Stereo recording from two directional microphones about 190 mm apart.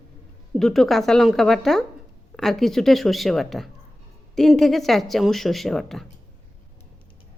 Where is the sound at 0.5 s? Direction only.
Centre (ahead or behind).